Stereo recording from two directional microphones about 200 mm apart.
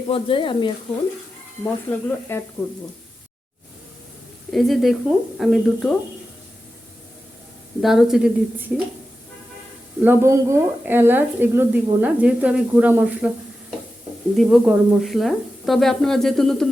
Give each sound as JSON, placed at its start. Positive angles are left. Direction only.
{"t": 0.1, "sound": "speech", "side_deg": 25}
{"t": 1.6, "sound": "speech", "side_deg": 10}
{"t": 4.5, "sound": "speech", "side_deg": 0}
{"t": 7.8, "sound": "speech", "side_deg": 0}
{"t": 10.0, "sound": "speech", "side_deg": -10}